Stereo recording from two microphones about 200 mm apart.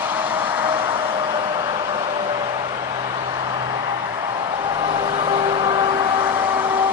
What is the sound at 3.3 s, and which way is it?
Vehicle, 20° right (ahead or behind).